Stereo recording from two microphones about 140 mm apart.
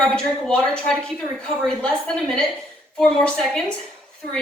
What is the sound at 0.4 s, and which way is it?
A woman's voice, 5° left (ahead or behind).